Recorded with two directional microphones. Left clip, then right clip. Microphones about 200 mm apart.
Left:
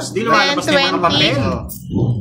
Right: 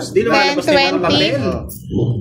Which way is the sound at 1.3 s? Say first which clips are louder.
Even; 30° left (ahead or behind).